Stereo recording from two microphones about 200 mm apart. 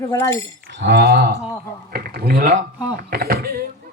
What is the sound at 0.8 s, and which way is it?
Speech, 60° right (ahead or behind).